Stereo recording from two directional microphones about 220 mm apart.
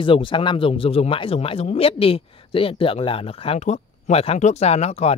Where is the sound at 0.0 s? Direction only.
25° left (ahead or behind).